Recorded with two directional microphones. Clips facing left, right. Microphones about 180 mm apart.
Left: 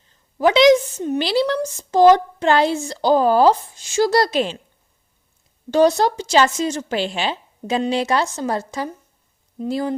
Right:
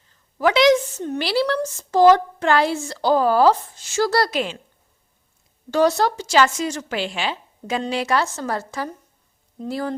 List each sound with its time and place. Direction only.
0.3 s a woman's voice: 20° left (ahead or behind)
5.7 s a woman's voice: 20° left (ahead or behind)